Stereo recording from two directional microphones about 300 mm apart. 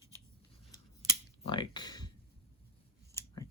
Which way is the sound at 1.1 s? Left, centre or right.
Centre.